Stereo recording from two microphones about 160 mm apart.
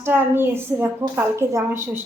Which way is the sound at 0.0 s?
15° right (ahead or behind).